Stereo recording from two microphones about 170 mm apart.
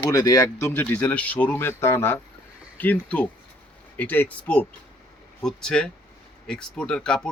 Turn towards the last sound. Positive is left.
turn(degrees=5)  # may be behind; listen again after turning